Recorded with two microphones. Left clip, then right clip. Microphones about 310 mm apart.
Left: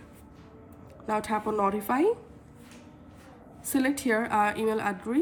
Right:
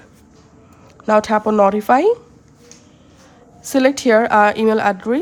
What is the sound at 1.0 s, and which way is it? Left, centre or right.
A woman's voice, right.